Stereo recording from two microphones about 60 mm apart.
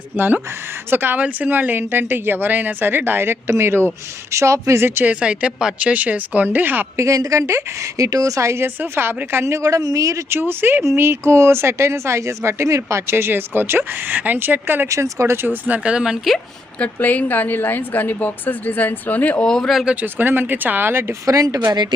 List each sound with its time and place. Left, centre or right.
0.2 s a woman's voice: right
5.0 s speech: centre
5.8 s speech: right
6.9 s a woman's voice: right
8.6 s a woman's voice: right
10.2 s a woman's voice: right
13.1 s a woman's voice: right
14.8 s speech: right
15.6 s speech: right
16.8 s a woman's voice: left
19.5 s speech: centre
20.0 s a woman's voice: right
21.2 s speech: right